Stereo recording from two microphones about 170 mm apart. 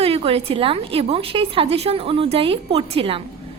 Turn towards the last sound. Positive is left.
turn(degrees=-35)  # may be behind; listen again after turning